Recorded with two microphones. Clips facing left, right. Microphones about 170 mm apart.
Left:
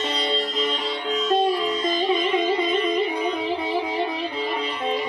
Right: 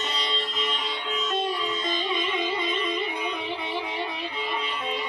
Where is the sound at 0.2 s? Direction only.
35° left (ahead or behind).